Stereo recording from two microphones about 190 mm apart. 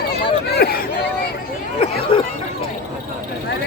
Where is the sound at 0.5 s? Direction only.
55° left (ahead or behind).